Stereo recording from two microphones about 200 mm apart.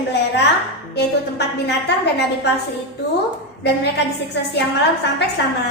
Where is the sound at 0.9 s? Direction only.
55° left (ahead or behind).